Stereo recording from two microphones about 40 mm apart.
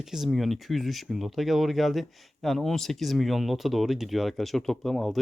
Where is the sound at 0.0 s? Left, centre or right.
Centre.